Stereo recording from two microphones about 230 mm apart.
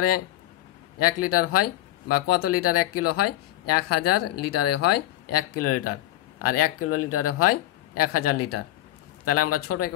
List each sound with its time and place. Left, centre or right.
0.9 s speech: left